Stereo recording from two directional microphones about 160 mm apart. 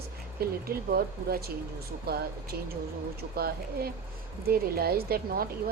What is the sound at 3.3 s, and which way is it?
Speech, 75° right (ahead or behind).